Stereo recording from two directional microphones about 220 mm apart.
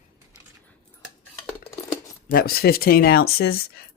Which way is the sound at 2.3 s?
40° left (ahead or behind).